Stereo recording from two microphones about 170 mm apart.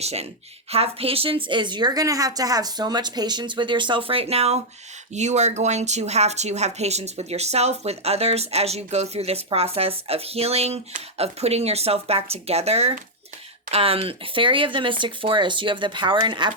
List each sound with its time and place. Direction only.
0.0 s a woman's voice: 40° right (ahead or behind)